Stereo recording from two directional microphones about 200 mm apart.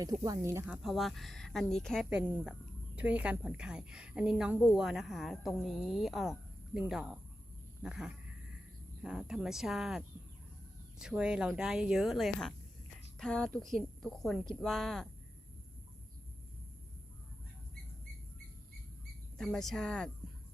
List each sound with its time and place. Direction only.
0.0 s speech: 20° right (ahead or behind); by 10.0 s centre (ahead or behind)
11.0 s speech: 5° right (ahead or behind)
19.4 s speech: centre (ahead or behind)